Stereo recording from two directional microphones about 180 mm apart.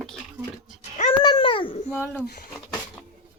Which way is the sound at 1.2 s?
25° left (ahead or behind).